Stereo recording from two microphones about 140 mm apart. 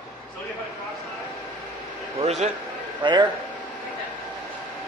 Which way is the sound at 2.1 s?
50° right (ahead or behind).